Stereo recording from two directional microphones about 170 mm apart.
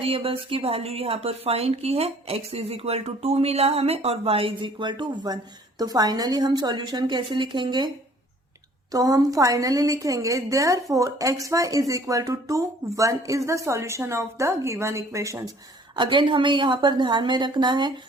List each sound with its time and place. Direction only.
0.0 s a woman's voice: 35° right (ahead or behind)
8.9 s a woman's voice: 20° right (ahead or behind)
16.0 s a woman's voice: 30° right (ahead or behind)